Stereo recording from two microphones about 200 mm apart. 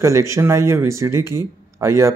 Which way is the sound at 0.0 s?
15° right (ahead or behind).